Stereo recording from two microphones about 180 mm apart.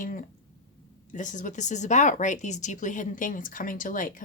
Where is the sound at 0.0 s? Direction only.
50° left (ahead or behind).